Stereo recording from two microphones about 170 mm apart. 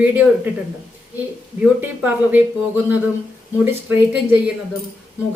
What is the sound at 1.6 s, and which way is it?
Speech, 10° right (ahead or behind).